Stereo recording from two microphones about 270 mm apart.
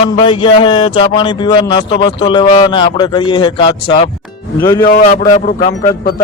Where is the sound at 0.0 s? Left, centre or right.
Centre.